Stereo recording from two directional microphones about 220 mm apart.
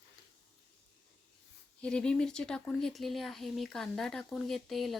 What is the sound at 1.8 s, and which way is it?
Speech, 5° left (ahead or behind).